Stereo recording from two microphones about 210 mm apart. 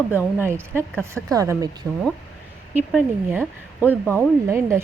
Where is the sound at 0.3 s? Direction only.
10° right (ahead or behind).